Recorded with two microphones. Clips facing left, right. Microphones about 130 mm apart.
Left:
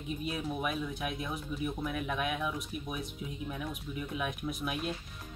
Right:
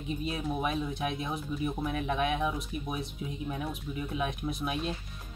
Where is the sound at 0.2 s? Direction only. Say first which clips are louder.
Right 2 dB; 30° right (ahead or behind).